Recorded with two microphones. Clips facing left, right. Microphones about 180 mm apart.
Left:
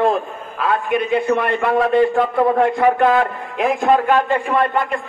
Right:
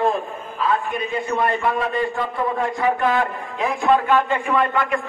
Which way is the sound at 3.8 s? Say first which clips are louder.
Left 1 dB; 40° left (ahead or behind).